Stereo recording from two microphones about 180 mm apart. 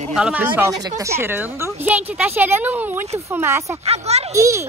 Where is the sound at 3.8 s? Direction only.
35° right (ahead or behind).